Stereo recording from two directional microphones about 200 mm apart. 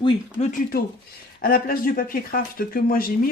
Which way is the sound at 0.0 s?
35° left (ahead or behind).